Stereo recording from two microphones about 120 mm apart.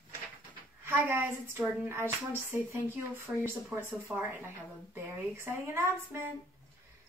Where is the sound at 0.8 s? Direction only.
20° right (ahead or behind).